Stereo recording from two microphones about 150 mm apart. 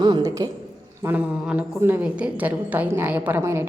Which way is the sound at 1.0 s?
10° right (ahead or behind).